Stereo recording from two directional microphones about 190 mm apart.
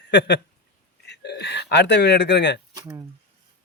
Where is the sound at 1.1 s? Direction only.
60° left (ahead or behind).